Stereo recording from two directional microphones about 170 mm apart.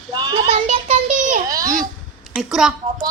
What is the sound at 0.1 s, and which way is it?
Child singing, 25° right (ahead or behind).